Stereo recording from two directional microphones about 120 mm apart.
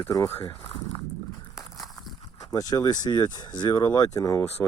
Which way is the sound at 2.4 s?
30° left (ahead or behind).